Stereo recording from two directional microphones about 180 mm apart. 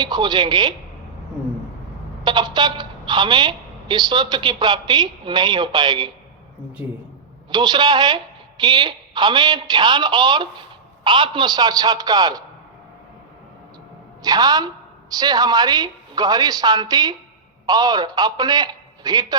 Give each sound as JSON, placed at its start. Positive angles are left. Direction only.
{"t": 0.0, "sound": "a woman's voice", "side_deg": -25}
{"t": 2.2, "sound": "a woman's voice", "side_deg": -25}
{"t": 7.5, "sound": "a woman's voice", "side_deg": -25}
{"t": 14.2, "sound": "a woman's voice", "side_deg": -20}